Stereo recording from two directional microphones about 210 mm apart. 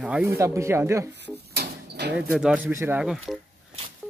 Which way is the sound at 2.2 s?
5° right (ahead or behind).